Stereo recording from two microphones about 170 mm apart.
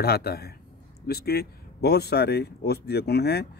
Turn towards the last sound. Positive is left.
turn(degrees=70)  # may be behind; listen again after turning